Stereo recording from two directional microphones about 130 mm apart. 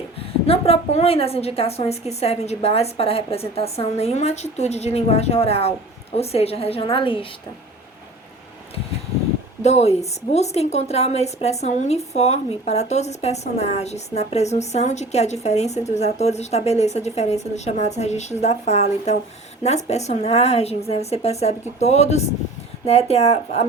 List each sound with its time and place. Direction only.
0.4 s a woman's voice: 50° left (ahead or behind)
9.6 s a woman's voice: 60° left (ahead or behind)